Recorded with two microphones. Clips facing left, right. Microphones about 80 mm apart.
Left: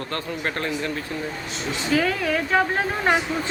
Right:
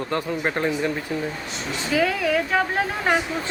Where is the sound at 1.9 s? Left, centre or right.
Centre.